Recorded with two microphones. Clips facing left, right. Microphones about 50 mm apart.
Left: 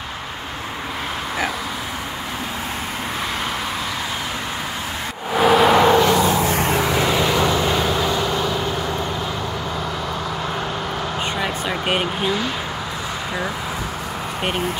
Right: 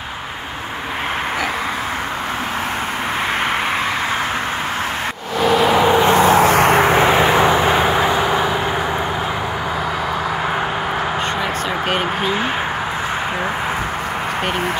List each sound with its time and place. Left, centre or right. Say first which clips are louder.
5.3 s vehicle: left 1 dB; centre
5.9 s a sound: right 1 dB; right
6.1 s vehicle: right 6 dB; right
6.8 s vehicle: right 6 dB; right